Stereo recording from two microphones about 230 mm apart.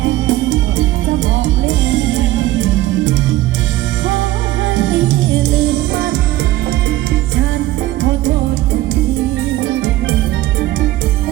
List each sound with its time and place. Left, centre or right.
0.0 s music: right